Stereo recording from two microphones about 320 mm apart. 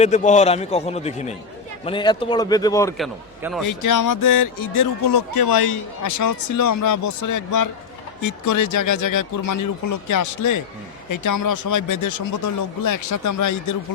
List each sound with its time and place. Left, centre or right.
0.0 s a man's voice: left
3.6 s speech: left